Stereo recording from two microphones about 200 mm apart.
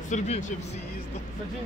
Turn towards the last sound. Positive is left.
turn(degrees=35)  # may be behind; listen again after turning